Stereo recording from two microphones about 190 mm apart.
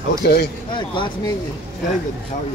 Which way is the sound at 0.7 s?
25° left (ahead or behind).